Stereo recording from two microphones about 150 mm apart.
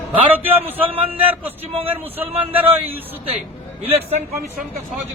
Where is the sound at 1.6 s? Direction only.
40° right (ahead or behind).